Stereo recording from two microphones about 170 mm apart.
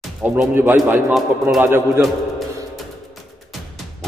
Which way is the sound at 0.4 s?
10° right (ahead or behind).